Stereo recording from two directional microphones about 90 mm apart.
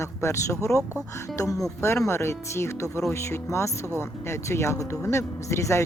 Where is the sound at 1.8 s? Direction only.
30° left (ahead or behind).